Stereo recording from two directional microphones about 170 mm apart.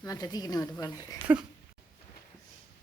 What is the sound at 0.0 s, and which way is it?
Speech, 20° left (ahead or behind).